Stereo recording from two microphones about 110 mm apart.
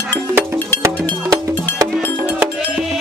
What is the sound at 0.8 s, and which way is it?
Music, 30° right (ahead or behind).